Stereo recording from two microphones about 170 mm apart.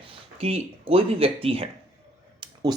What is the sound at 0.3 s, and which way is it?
Speech, 35° right (ahead or behind).